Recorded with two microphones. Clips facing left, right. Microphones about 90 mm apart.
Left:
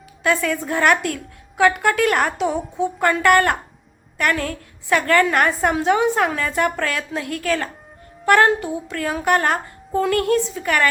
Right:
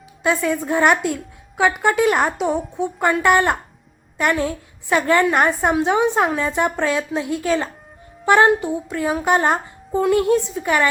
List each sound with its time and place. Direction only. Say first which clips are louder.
0.2 s a woman's voice: right 1 dB; 15° right (ahead or behind)